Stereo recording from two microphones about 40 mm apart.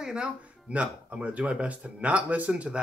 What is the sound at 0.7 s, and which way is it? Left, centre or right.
Speech, right.